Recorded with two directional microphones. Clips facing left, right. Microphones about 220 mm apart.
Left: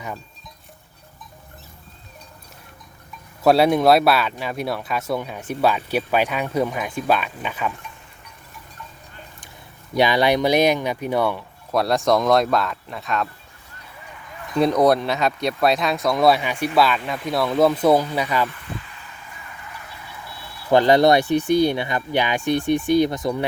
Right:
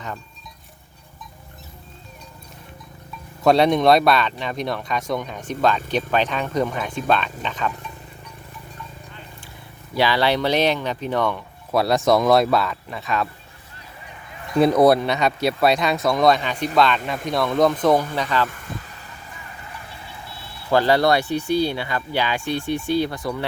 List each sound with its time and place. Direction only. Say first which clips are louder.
3.4 s speech: even; 5° left (ahead or behind)
9.9 s speech: left 2 dB; 15° left (ahead or behind)
11.7 s speech: right 1 dB; centre (ahead or behind)
14.6 s speech: right 2 dB; 5° right (ahead or behind); by 18.4 s 10° left (ahead or behind)
18.4 s vehicle: left 1 dB; 45° right (ahead or behind)
19.6 s vehicle: even; 30° right (ahead or behind)
20.7 s speech: left 3 dB; 20° left (ahead or behind)